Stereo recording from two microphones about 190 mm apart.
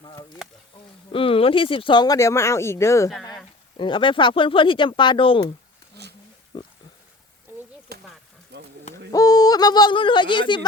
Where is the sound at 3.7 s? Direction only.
25° left (ahead or behind).